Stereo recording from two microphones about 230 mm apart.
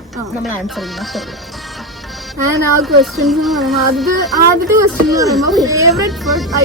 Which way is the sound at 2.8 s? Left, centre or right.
Centre.